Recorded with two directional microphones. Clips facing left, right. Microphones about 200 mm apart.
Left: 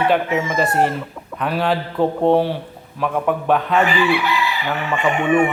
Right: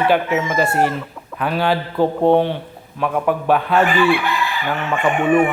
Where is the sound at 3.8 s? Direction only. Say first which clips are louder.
Right 2 dB; 50° right (ahead or behind).